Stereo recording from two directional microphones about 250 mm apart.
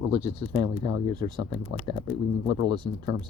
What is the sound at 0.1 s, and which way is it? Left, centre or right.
Speech, right.